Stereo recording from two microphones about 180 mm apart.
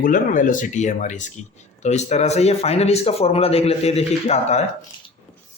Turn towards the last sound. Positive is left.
turn(degrees=35)  # may be behind; listen again after turning